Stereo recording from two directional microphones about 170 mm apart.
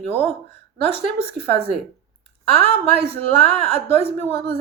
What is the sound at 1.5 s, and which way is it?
Speech, 35° right (ahead or behind).